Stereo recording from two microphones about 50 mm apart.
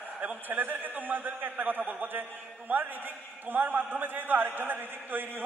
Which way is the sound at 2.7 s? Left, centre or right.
Right.